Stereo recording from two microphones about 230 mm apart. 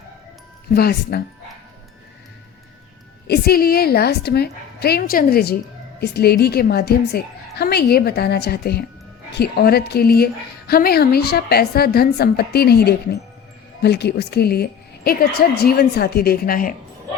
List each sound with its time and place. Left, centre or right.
0.7 s a woman's voice: left
3.2 s a woman's voice: left